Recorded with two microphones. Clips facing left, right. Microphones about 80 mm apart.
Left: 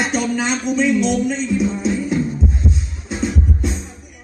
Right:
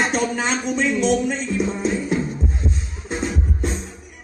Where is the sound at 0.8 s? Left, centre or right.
Right.